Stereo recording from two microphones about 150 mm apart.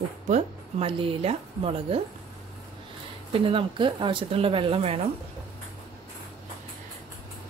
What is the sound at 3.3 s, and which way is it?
Speech, 35° right (ahead or behind).